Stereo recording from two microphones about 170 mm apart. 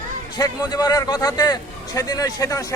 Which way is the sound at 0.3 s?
25° left (ahead or behind).